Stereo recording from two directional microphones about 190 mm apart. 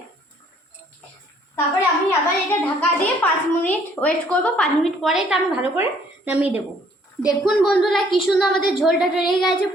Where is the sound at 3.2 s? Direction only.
10° left (ahead or behind).